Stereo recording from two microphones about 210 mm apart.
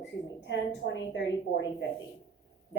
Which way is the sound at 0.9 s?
55° left (ahead or behind).